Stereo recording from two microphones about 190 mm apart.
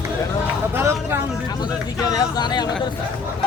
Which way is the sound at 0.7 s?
15° right (ahead or behind).